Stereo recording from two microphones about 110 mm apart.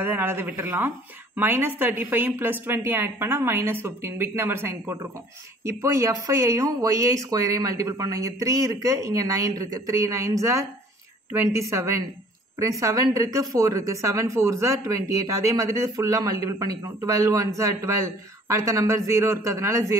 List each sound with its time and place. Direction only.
0.0 s speech: 20° right (ahead or behind)